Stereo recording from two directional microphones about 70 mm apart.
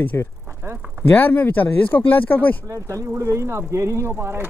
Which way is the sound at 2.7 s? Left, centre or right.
Right.